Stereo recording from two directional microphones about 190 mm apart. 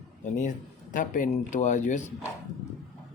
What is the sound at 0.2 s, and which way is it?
Speech, 40° left (ahead or behind).